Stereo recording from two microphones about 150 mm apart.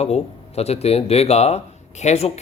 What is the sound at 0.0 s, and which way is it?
Speech, 45° left (ahead or behind).